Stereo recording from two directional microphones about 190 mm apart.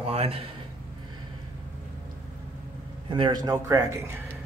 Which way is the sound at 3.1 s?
25° right (ahead or behind).